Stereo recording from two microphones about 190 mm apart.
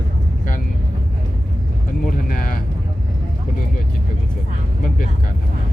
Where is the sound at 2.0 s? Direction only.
50° left (ahead or behind).